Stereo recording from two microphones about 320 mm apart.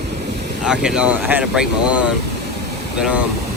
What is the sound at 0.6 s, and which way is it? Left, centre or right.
Speech, centre.